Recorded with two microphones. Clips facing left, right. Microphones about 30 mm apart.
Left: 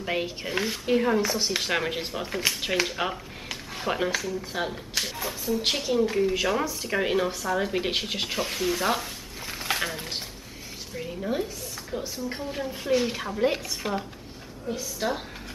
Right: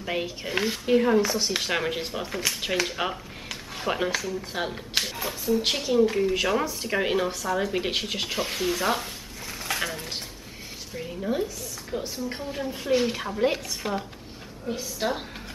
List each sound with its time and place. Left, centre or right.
0.0 s speech: centre
9.5 s a sound: centre
11.0 s a woman's voice: centre
14.8 s a woman's voice: centre